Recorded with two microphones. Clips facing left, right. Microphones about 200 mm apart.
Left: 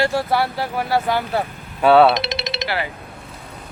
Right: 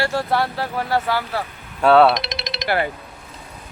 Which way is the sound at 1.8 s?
Centre (ahead or behind).